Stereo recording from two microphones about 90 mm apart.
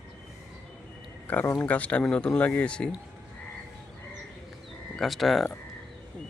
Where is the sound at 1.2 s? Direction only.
20° left (ahead or behind).